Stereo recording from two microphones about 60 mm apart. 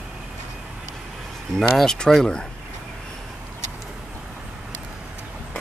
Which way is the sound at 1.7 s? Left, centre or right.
Centre.